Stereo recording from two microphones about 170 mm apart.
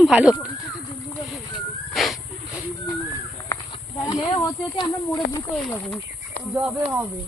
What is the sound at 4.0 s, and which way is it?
Speech, 20° left (ahead or behind).